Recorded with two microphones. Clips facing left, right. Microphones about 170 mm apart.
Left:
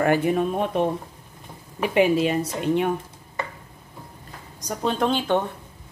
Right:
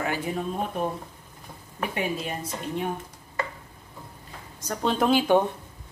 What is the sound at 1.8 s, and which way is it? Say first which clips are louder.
A woman's voice: left 10 dB; 85° left.